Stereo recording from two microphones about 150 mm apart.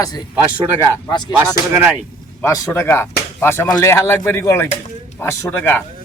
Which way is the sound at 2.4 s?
20° left (ahead or behind).